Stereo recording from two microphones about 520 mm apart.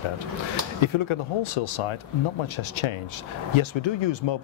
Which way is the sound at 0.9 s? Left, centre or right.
Left.